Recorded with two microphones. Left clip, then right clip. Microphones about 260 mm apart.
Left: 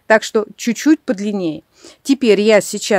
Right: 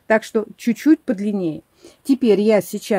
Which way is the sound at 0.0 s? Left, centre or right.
Left.